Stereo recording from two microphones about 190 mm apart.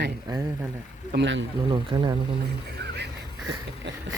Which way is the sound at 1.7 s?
25° right (ahead or behind).